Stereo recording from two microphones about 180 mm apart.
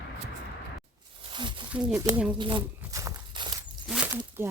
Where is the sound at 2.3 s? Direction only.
20° right (ahead or behind).